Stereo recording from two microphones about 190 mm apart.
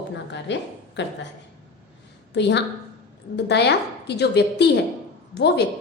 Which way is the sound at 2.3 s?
65° left (ahead or behind).